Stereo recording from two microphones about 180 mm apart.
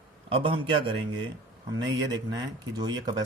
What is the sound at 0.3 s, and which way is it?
Speech, 30° right (ahead or behind).